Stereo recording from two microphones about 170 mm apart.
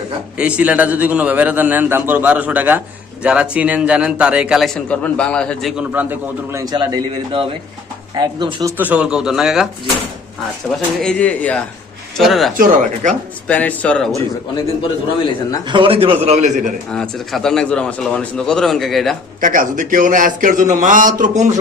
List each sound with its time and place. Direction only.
0.3 s a man's voice: 5° right (ahead or behind); by 8.7 s 25° right (ahead or behind)
8.8 s speech: 5° right (ahead or behind)
11.0 s speech: 5° left (ahead or behind)
12.5 s a man's voice: 50° right (ahead or behind)
13.5 s speech: 10° left (ahead or behind)
15.7 s a man's voice: 30° right (ahead or behind)
16.9 s speech: 5° left (ahead or behind)
19.4 s a man's voice: 50° right (ahead or behind)